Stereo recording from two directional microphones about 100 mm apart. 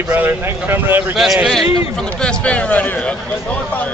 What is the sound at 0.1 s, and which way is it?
Speech, 20° right (ahead or behind).